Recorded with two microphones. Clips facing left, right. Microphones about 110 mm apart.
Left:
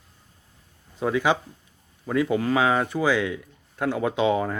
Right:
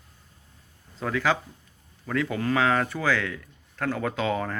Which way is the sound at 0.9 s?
20° left (ahead or behind).